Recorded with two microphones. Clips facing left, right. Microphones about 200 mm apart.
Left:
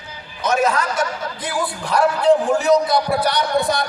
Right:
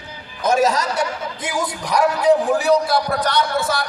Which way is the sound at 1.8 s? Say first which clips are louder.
Even; 10° right (ahead or behind).